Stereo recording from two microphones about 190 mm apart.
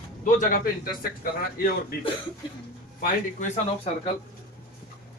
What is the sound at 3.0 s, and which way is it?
Speech, 40° left (ahead or behind).